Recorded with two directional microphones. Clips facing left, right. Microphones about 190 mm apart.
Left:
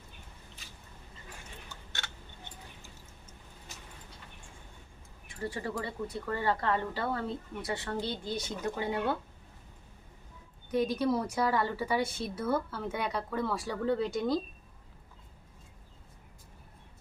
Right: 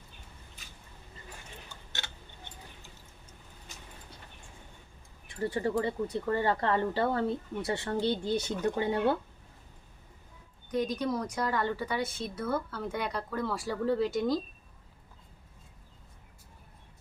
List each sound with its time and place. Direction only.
1.7 s a sound: 20° right (ahead or behind)
5.5 s speech: 30° right (ahead or behind)
10.7 s a woman's voice: 5° left (ahead or behind)